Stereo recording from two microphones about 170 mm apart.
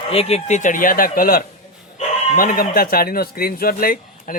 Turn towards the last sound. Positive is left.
turn(degrees=55)  # may be behind; listen again after turning